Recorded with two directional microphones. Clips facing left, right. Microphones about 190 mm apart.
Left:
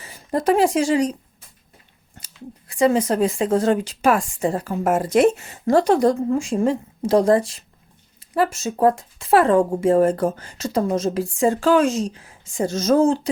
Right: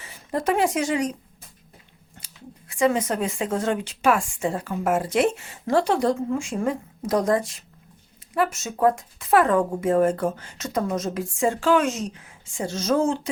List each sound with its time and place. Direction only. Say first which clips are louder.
0.0 s a woman's voice: left 4 dB; 40° left (ahead or behind)
2.2 s speech: left 6 dB; 35° left (ahead or behind)